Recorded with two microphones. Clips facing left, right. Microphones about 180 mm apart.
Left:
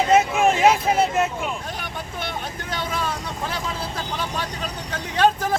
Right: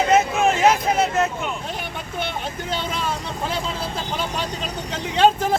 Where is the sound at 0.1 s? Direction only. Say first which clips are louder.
Left 2 dB; centre (ahead or behind).